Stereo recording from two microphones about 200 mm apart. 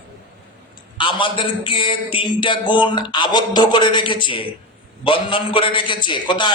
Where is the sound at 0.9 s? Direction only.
25° left (ahead or behind).